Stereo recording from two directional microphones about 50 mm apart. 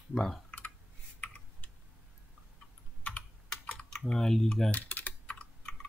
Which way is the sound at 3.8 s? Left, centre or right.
Centre.